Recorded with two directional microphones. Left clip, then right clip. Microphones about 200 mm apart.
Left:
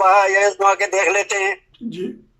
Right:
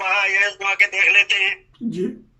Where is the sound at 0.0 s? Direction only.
40° left (ahead or behind).